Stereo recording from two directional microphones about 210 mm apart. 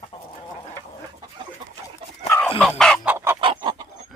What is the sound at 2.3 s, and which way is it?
Dog, 10° left (ahead or behind).